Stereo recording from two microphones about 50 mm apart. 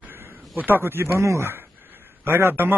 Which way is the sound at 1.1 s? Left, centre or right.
Right.